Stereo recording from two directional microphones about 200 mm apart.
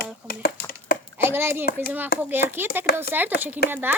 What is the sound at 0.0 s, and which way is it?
Typing, 50° left (ahead or behind).